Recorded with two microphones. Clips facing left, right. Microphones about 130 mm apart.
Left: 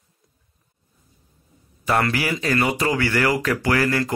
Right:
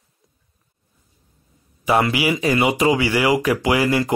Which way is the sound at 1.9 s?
10° right (ahead or behind).